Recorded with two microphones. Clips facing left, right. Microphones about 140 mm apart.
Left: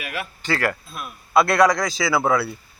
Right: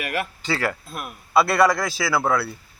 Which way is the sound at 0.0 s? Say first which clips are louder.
Right 4 dB; 55° right (ahead or behind).